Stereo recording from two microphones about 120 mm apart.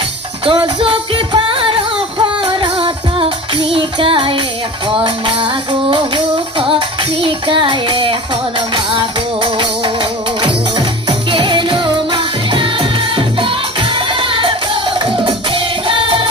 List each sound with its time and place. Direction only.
0.5 s music: 45° right (ahead or behind)